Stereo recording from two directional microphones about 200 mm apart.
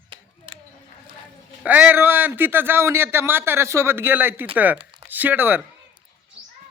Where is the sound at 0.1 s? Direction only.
25° right (ahead or behind).